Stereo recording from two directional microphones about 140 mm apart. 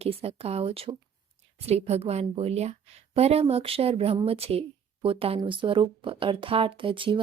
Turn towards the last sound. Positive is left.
turn(degrees=-35)  # may be behind; listen again after turning